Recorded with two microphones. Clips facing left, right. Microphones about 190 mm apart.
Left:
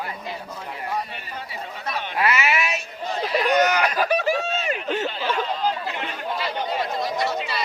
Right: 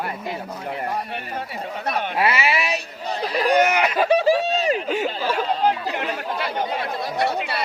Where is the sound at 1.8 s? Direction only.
55° right (ahead or behind).